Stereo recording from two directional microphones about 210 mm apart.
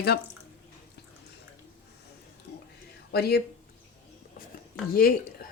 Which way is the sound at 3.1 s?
50° left (ahead or behind).